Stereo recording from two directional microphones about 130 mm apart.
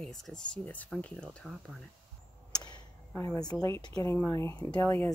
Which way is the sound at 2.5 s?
30° left (ahead or behind).